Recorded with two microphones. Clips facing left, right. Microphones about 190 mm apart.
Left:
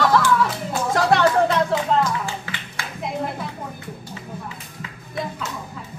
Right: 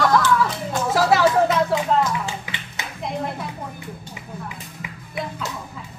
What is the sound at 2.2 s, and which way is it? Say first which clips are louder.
Music: left 1 dB; 20° right (ahead or behind).